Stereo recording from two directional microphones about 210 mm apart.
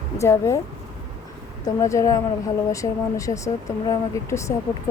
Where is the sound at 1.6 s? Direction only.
15° left (ahead or behind).